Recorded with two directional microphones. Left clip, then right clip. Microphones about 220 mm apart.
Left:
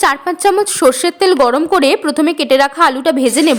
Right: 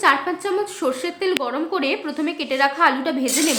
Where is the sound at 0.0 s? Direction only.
50° left (ahead or behind).